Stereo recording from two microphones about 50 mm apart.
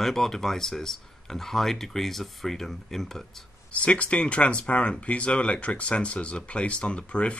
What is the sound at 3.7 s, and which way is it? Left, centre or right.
Speech, left.